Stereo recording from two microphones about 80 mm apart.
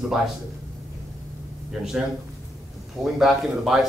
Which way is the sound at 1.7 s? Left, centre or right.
Centre.